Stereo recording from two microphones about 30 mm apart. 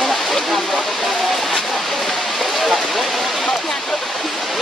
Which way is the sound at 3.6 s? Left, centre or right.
Centre.